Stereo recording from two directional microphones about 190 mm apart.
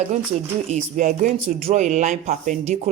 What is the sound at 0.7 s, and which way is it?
Speech, 40° right (ahead or behind).